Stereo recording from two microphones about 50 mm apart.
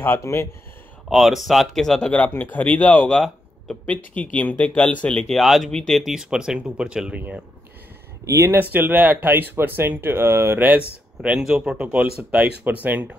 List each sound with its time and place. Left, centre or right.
0.2 s speech: left
1.1 s speech: centre
2.2 s speech: left
5.3 s speech: centre
5.9 s speech: centre
8.2 s speech: right
8.5 s speech: right
11.3 s speech: centre
11.7 s speech: right
12.6 s speech: right